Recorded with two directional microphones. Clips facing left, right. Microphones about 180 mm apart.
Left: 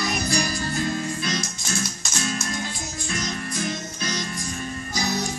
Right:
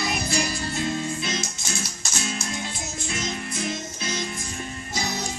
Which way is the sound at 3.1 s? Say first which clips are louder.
Left 1 dB; 25° right (ahead or behind).